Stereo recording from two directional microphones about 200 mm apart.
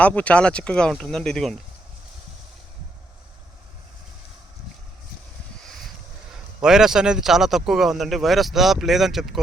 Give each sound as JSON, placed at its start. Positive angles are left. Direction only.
{"t": 0.0, "sound": "speech", "side_deg": 5}
{"t": 6.6, "sound": "speech", "side_deg": -5}